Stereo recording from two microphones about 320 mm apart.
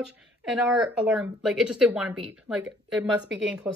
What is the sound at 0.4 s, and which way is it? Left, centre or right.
Speech, centre.